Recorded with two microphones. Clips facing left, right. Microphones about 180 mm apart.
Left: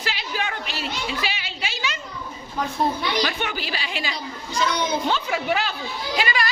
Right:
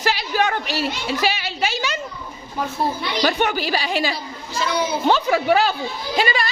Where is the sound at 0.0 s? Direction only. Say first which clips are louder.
Right 8 dB; 40° right (ahead or behind).